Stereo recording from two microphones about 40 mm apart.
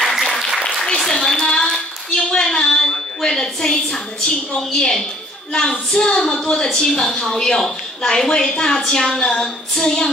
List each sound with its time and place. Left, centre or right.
0.0 s applause: centre
0.6 s applause: left
1.0 s a child's voice: centre
1.4 s a sound: centre
5.5 s a woman's voice: centre